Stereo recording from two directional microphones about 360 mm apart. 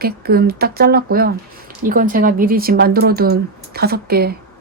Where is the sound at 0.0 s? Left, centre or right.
Right.